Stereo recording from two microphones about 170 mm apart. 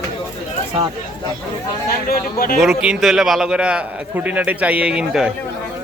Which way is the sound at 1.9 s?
60° left (ahead or behind).